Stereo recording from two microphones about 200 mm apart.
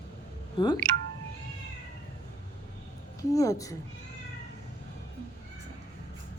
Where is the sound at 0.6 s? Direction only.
25° left (ahead or behind).